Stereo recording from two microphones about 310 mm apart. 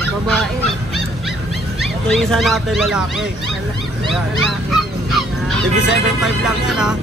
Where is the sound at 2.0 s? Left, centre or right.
Centre.